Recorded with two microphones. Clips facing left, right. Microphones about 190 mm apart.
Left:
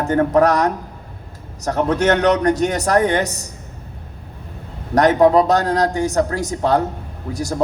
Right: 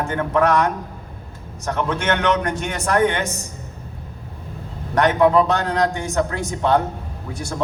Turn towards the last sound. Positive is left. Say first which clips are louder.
# left 5 dB
turn(degrees=40)  # may be behind; listen again after turning